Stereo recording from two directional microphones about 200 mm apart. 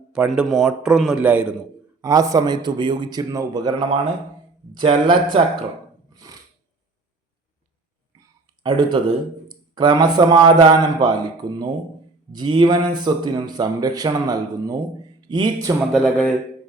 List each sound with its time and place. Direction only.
0.1 s a man's voice: 5° right (ahead or behind)
2.0 s speech: 20° right (ahead or behind)
6.3 s a sound: 15° right (ahead or behind)
8.6 s a man's voice: 20° right (ahead or behind)
15.9 s a man's voice: 5° left (ahead or behind)